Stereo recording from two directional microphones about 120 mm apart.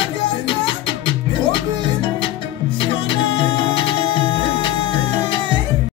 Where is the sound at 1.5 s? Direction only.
40° left (ahead or behind).